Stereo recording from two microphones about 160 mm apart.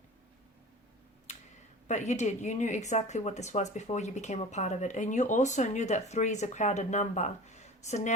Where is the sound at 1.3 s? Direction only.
45° left (ahead or behind).